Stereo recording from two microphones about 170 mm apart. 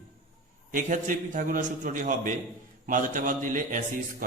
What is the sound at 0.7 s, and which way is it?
Mantra, 50° right (ahead or behind).